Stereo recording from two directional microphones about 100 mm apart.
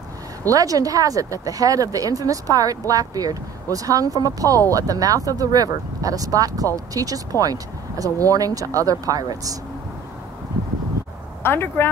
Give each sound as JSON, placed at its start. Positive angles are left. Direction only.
{"t": 0.5, "sound": "speech", "side_deg": -35}
{"t": 11.4, "sound": "speech", "side_deg": 25}